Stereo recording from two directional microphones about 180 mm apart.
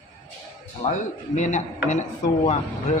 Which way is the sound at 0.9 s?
45° left (ahead or behind).